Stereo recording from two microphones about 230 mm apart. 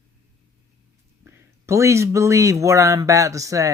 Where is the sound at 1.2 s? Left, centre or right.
Centre.